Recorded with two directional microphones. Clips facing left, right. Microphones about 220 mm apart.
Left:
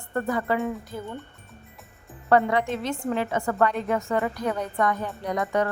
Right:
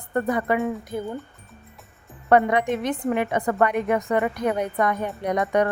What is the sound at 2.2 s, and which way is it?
Speech, 20° right (ahead or behind).